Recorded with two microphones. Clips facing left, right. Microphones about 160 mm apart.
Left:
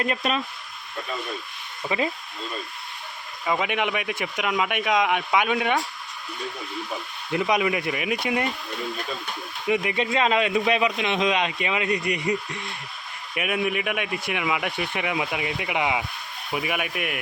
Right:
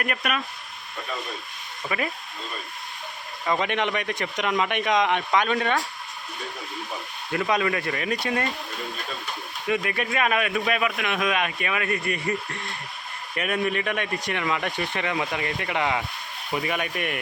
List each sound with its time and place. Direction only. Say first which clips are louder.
0.0 s speech: left 2 dB; 25° left (ahead or behind)
1.9 s speech: left 3 dB; 25° left (ahead or behind)
3.4 s speech: even; 5° left (ahead or behind)
7.3 s speech: left 1 dB; 15° left (ahead or behind)
9.6 s speech: left 2 dB; 20° left (ahead or behind)